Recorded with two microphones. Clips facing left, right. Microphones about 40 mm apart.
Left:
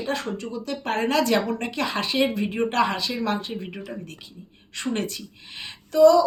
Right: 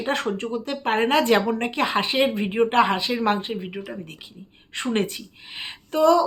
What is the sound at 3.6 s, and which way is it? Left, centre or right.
Speech, centre.